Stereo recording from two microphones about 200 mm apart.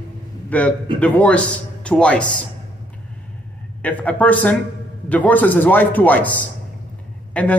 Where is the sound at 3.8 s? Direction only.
10° left (ahead or behind).